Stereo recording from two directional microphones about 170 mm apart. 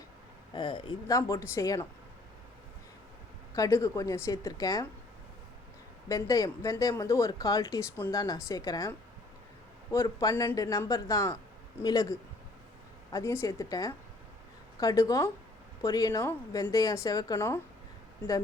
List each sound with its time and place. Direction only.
0.5 s speech: 30° left (ahead or behind)
3.5 s speech: 20° left (ahead or behind)
6.1 s speech: 20° left (ahead or behind)